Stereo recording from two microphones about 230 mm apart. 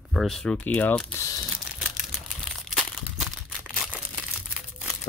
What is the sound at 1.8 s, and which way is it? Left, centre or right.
Crumpling, centre.